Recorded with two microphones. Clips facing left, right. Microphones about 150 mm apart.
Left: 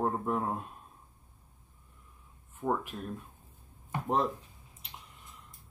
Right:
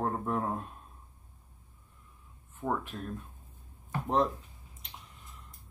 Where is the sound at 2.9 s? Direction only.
80° right.